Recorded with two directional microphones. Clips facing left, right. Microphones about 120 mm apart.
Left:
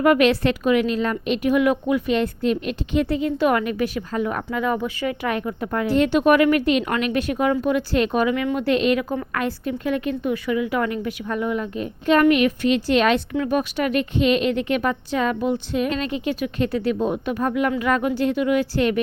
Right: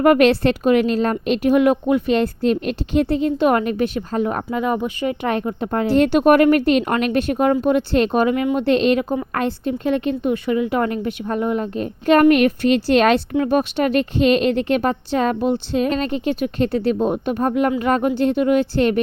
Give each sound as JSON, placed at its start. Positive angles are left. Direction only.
{"t": 0.0, "sound": "speech", "side_deg": -45}
{"t": 0.3, "sound": "a woman's voice", "side_deg": -30}
{"t": 6.1, "sound": "a woman's voice", "side_deg": -50}
{"t": 10.5, "sound": "a woman's voice", "side_deg": -35}
{"t": 17.5, "sound": "a woman's voice", "side_deg": -40}